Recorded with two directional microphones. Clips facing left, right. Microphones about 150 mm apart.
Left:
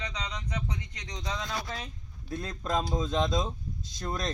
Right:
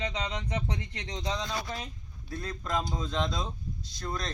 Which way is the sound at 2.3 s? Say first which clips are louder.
Left 2 dB; 25° left (ahead or behind).